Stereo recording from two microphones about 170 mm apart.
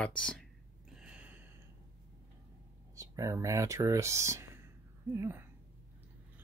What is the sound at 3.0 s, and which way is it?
Speech, 20° right (ahead or behind).